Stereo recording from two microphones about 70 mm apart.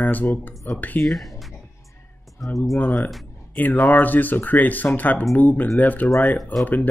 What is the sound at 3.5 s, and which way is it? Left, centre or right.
Speech, left.